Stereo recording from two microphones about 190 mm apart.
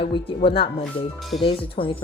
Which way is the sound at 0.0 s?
25° left (ahead or behind).